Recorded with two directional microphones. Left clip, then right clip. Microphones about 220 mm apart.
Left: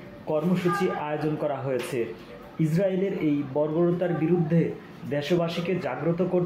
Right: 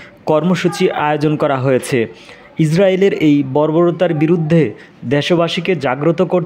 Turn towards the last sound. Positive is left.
turn(degrees=-50)  # may be behind; listen again after turning